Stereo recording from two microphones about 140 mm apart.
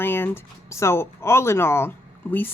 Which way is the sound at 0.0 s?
15° left (ahead or behind).